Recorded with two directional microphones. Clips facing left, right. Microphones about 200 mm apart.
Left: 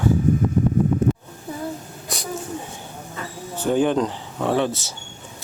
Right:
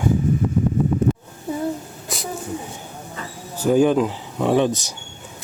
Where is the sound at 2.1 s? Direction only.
Centre (ahead or behind).